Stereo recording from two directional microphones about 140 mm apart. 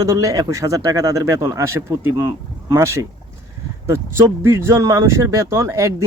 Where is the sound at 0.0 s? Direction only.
25° right (ahead or behind).